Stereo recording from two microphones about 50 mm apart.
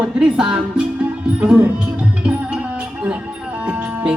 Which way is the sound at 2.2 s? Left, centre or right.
Right.